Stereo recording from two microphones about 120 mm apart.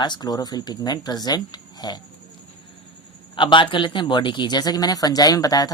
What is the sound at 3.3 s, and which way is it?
Speech, 45° left (ahead or behind).